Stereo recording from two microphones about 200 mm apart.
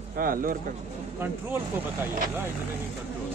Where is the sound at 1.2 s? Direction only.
10° right (ahead or behind).